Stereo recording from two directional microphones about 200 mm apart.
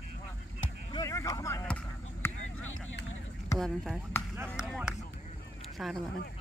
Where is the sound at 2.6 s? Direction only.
80° left.